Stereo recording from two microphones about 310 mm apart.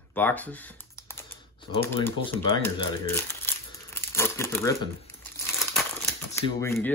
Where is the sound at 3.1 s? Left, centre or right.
Centre.